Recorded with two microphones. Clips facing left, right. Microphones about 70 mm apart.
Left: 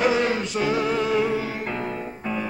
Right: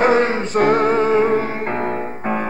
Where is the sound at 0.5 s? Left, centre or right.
Right.